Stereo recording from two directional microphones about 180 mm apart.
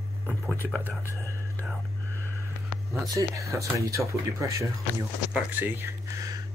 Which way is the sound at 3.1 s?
15° right (ahead or behind).